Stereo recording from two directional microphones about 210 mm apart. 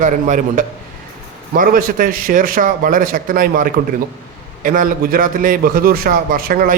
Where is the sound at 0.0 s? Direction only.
35° right (ahead or behind).